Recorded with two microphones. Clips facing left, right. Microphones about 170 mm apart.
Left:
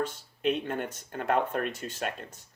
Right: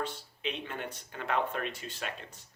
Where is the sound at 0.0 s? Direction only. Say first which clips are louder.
Left 7 dB; 45° left (ahead or behind).